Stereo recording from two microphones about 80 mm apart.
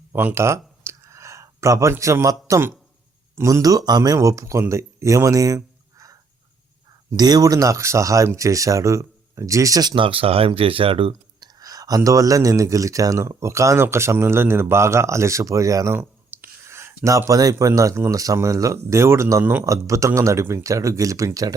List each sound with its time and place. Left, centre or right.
0.1 s a sound: right
3.4 s speech: right
4.7 s a sound: right
7.1 s speech: right
9.9 s speech: right
11.1 s speech: right
16.0 s a sound: right
17.5 s speech: right
19.6 s speech: right